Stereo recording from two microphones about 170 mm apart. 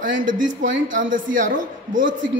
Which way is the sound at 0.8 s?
50° right (ahead or behind).